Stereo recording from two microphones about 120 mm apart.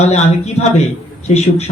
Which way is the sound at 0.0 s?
65° left (ahead or behind).